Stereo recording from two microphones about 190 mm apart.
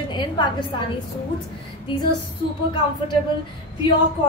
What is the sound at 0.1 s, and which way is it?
Speech, 25° left (ahead or behind).